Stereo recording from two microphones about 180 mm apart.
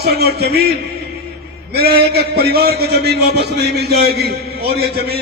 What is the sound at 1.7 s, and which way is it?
A man's voice, 60° right (ahead or behind).